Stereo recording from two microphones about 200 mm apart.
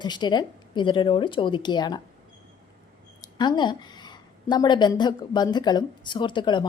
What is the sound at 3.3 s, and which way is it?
A woman's voice, 20° left (ahead or behind).